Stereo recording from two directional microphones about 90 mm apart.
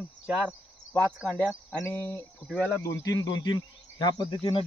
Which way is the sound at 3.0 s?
45° left (ahead or behind).